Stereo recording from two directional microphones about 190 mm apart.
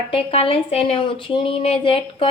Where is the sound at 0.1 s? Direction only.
30° left (ahead or behind).